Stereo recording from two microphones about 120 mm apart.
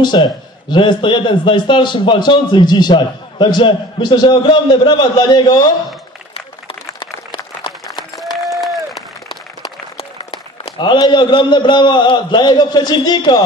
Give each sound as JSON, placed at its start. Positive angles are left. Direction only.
{"t": 0.0, "sound": "a man's voice", "side_deg": 40}
{"t": 6.3, "sound": "a sound", "side_deg": 45}
{"t": 7.7, "sound": "run", "side_deg": 45}
{"t": 8.2, "sound": "applause", "side_deg": 0}
{"t": 10.6, "sound": "a man's voice", "side_deg": 40}